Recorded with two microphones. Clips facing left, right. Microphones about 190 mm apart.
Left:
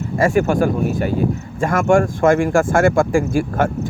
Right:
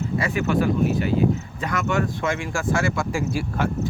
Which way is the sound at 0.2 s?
45° left (ahead or behind).